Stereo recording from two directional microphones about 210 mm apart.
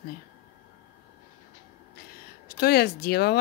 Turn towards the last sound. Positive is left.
turn(degrees=50)  # may be behind; listen again after turning